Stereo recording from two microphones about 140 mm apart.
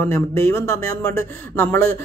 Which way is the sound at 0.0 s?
15° left (ahead or behind).